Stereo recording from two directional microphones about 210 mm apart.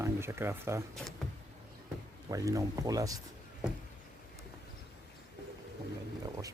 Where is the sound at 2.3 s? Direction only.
15° right (ahead or behind).